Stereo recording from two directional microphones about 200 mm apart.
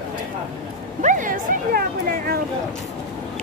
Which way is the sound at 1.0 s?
40° right (ahead or behind).